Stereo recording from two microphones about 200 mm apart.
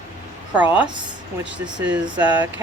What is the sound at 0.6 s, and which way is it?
Speech, 5° right (ahead or behind).